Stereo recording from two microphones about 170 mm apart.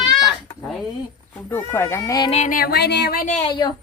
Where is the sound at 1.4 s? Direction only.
15° left (ahead or behind).